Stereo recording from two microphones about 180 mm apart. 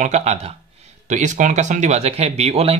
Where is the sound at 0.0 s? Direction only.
40° right (ahead or behind).